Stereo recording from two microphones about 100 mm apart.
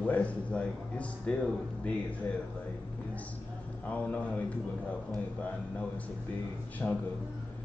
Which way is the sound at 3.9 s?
15° left (ahead or behind).